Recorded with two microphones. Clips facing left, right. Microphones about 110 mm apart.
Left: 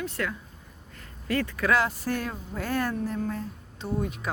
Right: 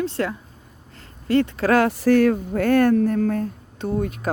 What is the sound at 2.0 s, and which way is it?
Speech, 75° right (ahead or behind).